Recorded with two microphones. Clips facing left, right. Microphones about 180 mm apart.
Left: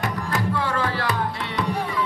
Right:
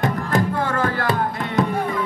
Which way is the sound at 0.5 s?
50° right (ahead or behind).